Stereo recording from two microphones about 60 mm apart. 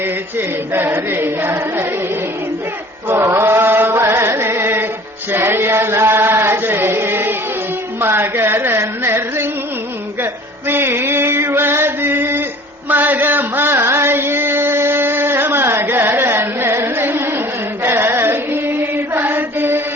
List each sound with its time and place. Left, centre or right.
0.0 s chant: right
3.2 s chant: right
7.9 s carnatic music: right
10.7 s chant: right